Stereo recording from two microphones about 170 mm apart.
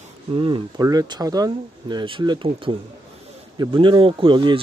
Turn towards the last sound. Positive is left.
turn(degrees=-30)  # may be behind; listen again after turning